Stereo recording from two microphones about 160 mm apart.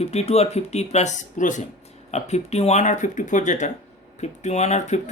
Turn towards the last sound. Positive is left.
turn(degrees=45)  # may be behind; listen again after turning